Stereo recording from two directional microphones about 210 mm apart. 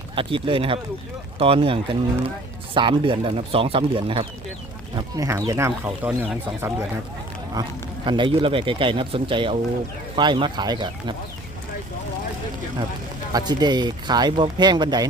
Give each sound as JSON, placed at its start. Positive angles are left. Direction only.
{"t": 0.2, "sound": "speech", "side_deg": -25}
{"t": 13.3, "sound": "speech", "side_deg": -20}